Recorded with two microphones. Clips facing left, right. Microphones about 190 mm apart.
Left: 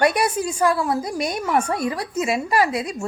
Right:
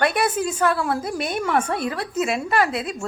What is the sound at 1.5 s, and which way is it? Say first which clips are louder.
Speech: left 2 dB; 10° left (ahead or behind).